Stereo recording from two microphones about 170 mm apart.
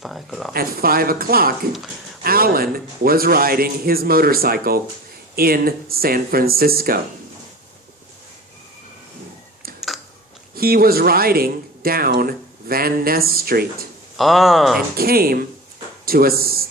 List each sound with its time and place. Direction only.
0.0 s speech: centre (ahead or behind)
0.5 s a man's voice: 60° right (ahead or behind)
10.5 s speech: 60° right (ahead or behind)
14.2 s speech: centre (ahead or behind)
14.9 s a man's voice: 60° right (ahead or behind)